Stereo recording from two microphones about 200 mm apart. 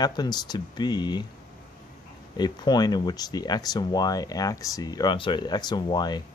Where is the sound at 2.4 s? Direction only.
20° left (ahead or behind).